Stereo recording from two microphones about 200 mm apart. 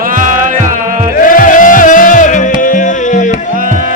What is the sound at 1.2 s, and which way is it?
Music, 45° left (ahead or behind).